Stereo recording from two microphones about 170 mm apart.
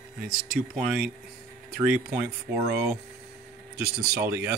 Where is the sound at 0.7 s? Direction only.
5° right (ahead or behind).